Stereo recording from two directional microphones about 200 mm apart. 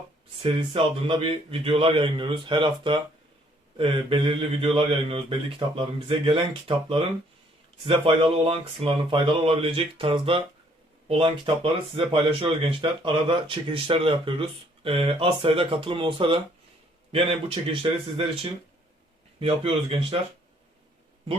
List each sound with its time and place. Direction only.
0.4 s speech: 25° right (ahead or behind)
19.4 s speech: 25° right (ahead or behind)